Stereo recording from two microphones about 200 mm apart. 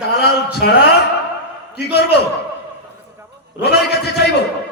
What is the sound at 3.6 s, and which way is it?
Speech, 55° left (ahead or behind).